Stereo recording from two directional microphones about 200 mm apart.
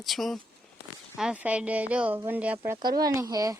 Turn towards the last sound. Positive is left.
turn(degrees=-15)  # may be behind; listen again after turning